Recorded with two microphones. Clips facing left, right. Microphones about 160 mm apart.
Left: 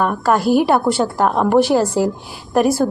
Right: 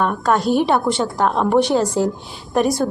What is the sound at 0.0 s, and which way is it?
A woman's voice, 5° left (ahead or behind).